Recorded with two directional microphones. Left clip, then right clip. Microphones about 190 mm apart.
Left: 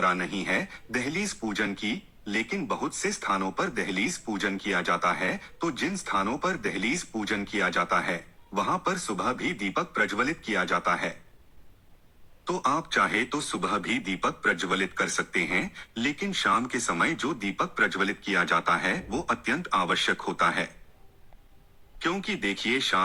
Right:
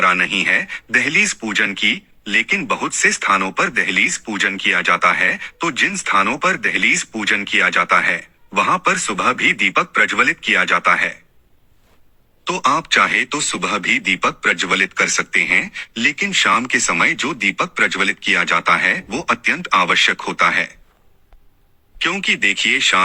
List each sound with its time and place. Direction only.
0.0 s speech: 20° right (ahead or behind)
0.3 s speech: 45° right (ahead or behind)
13.0 s speech: 45° right (ahead or behind)
14.5 s speech: 20° right (ahead or behind)
15.2 s speech: 45° right (ahead or behind)
15.7 s speech: 20° right (ahead or behind)
16.2 s speech: 40° right (ahead or behind)
16.6 s speech: 20° right (ahead or behind)
16.9 s speech: 40° right (ahead or behind)
19.0 s speech: 20° right (ahead or behind)
22.0 s speech: 45° right (ahead or behind)